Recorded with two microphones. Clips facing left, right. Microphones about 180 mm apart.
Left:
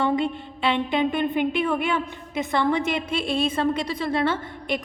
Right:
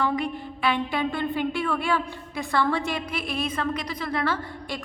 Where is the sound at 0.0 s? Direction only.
25° left (ahead or behind).